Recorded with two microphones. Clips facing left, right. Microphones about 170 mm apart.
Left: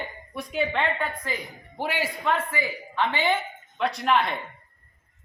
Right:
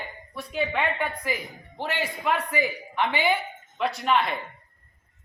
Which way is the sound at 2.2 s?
15° right (ahead or behind).